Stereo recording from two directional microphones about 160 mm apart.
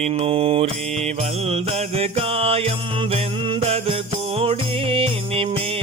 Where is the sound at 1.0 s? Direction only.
40° right (ahead or behind).